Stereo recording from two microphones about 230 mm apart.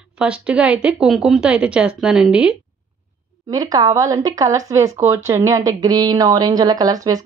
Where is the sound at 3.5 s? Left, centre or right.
Centre.